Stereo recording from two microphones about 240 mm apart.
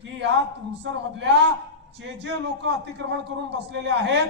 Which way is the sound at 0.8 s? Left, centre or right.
Right.